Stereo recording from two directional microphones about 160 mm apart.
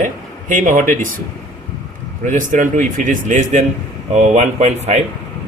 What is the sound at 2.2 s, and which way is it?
A man's voice, 55° right (ahead or behind).